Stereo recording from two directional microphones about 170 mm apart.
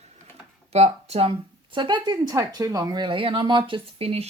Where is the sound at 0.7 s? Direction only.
35° right (ahead or behind).